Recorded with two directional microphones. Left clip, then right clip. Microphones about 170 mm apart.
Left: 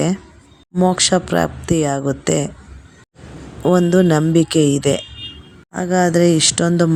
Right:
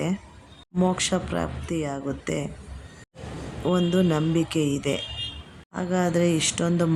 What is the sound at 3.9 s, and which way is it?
Speech, 40° left (ahead or behind).